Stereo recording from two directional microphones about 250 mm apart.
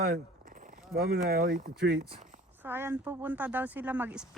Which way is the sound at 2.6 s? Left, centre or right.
Centre.